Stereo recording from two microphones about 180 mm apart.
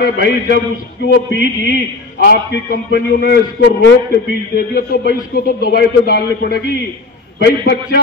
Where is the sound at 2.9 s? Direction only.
60° left (ahead or behind).